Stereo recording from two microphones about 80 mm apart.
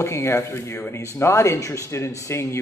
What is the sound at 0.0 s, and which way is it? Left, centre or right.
Speech, left.